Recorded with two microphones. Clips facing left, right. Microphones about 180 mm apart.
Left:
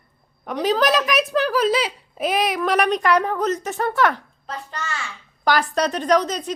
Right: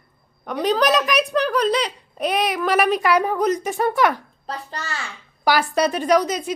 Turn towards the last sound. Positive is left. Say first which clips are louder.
# right 1 dB
turn(degrees=-10)  # may be behind; listen again after turning